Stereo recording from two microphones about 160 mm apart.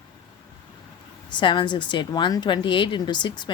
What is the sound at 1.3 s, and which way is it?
A woman's voice, 30° left (ahead or behind).